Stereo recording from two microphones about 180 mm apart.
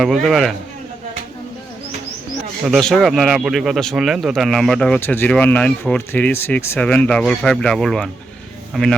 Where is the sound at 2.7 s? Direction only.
Centre (ahead or behind).